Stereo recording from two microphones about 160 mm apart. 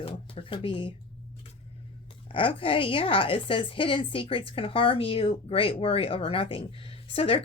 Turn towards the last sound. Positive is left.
turn(degrees=35)  # may be behind; listen again after turning